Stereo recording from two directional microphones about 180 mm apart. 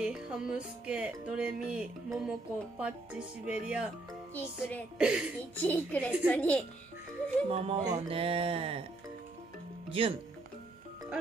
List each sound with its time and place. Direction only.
0.0 s music: 5° right (ahead or behind)
4.3 s speech: 10° left (ahead or behind)
4.9 s music: 5° right (ahead or behind)
5.6 s speech: 10° left (ahead or behind)
7.4 s speech: 35° right (ahead or behind)
9.8 s speech: 30° right (ahead or behind)